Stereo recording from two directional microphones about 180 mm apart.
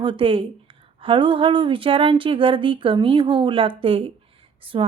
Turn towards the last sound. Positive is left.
turn(degrees=-30)  # may be behind; listen again after turning